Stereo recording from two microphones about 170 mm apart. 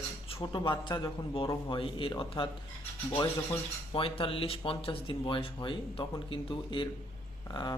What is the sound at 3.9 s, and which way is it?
Speech, 30° left (ahead or behind).